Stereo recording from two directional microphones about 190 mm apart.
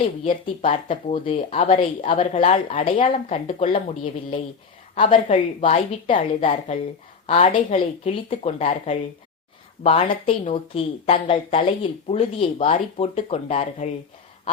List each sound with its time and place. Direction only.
0.3 s speech: 30° left (ahead or behind)